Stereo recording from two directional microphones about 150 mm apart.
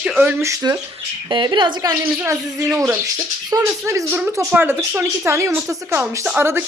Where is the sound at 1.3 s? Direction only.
30° right (ahead or behind).